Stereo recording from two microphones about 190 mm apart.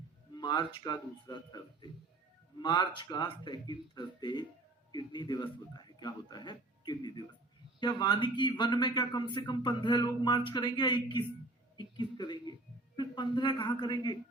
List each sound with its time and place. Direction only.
0.3 s speech: 25° left (ahead or behind)